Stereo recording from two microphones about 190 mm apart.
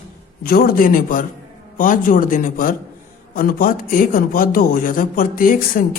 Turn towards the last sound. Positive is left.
turn(degrees=50)  # may be behind; listen again after turning